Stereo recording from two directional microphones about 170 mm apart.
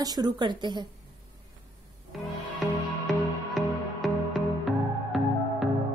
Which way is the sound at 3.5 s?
Centre (ahead or behind).